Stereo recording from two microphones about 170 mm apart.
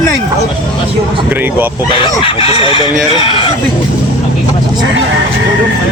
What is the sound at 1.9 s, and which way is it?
Chicken, 30° left (ahead or behind).